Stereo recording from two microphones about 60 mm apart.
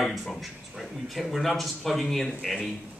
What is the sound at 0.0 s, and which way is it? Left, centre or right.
Speech, centre.